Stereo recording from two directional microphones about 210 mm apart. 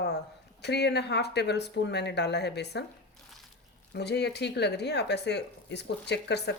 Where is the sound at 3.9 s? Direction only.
50° left (ahead or behind).